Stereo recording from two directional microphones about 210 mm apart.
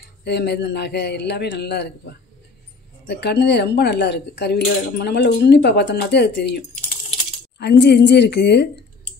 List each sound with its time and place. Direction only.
0.2 s speech: 50° left (ahead or behind)
3.1 s speech: 55° left (ahead or behind)